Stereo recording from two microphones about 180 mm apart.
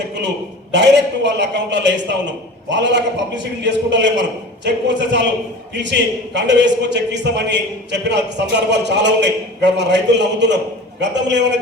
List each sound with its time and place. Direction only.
0.7 s a man's voice: 75° right (ahead or behind)